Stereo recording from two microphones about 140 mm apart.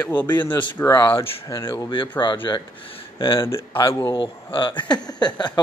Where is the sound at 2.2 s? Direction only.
35° left (ahead or behind).